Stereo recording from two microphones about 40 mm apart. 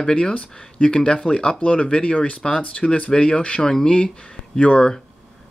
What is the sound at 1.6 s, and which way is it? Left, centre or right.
Speech, left.